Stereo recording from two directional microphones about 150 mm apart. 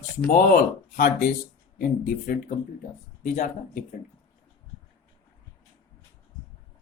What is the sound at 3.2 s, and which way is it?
Speech, 55° left (ahead or behind).